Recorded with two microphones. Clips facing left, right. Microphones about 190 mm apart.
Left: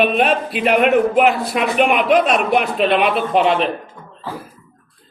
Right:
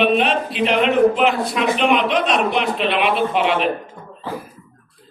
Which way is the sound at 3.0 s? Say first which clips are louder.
Left 2 dB; 40° left (ahead or behind).